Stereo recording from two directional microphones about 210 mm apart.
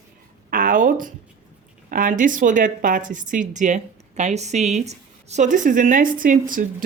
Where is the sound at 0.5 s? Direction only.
40° right (ahead or behind).